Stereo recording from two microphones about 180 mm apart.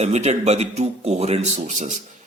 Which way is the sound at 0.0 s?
40° right (ahead or behind).